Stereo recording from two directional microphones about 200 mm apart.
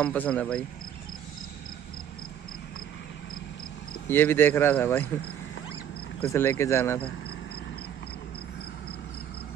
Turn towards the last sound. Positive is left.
turn(degrees=55)  # may be behind; listen again after turning